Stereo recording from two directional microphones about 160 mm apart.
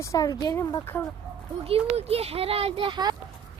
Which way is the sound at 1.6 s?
40° right (ahead or behind).